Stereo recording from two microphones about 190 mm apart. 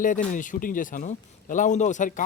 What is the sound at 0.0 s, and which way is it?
A man's voice, 45° left (ahead or behind).